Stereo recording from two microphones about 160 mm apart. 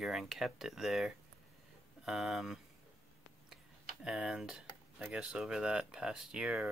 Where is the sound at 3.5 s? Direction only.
5° right (ahead or behind).